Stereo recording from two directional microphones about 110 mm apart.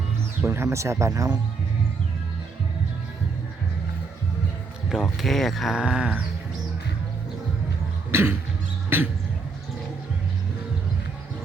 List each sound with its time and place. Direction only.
0.4 s speech: 20° right (ahead or behind)
5.1 s speech: centre (ahead or behind)
8.1 s speech: 20° right (ahead or behind)